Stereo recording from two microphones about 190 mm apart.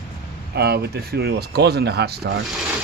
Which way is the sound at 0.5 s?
60° right (ahead or behind).